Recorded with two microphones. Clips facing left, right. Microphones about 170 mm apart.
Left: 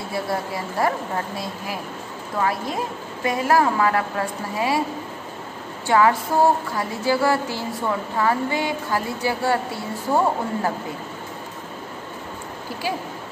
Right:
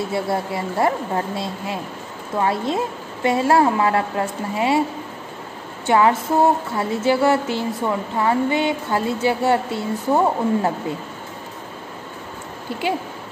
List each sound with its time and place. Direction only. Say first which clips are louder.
0.1 s speech: right 3 dB; 25° right (ahead or behind)
5.9 s speech: right 2 dB; 20° right (ahead or behind)